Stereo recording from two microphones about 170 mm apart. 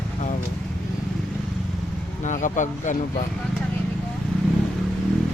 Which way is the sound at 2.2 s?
45° left (ahead or behind).